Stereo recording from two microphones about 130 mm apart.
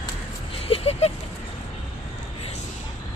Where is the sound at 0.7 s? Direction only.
55° left (ahead or behind).